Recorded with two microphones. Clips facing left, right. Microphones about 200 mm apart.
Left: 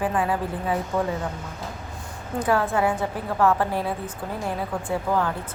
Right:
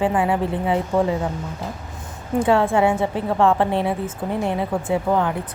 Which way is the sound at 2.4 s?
25° right (ahead or behind).